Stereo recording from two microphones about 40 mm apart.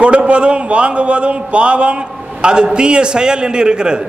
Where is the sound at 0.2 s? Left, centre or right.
Right.